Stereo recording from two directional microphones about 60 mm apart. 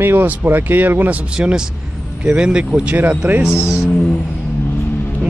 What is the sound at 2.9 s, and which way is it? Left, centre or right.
Speech, right.